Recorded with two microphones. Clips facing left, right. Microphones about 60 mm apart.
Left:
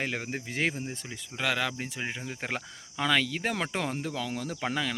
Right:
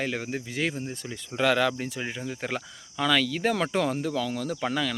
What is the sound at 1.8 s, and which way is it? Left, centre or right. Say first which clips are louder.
Speech: right 3 dB; left.